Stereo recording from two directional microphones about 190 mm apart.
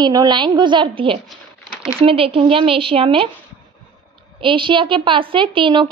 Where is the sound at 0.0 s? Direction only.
20° right (ahead or behind).